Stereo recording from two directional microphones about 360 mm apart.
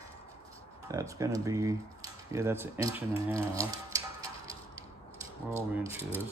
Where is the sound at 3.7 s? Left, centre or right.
Centre.